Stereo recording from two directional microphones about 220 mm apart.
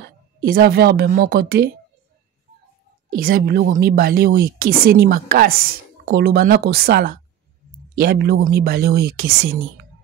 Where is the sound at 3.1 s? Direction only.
40° right (ahead or behind).